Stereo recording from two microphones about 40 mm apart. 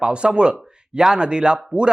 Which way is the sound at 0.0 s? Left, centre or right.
Right.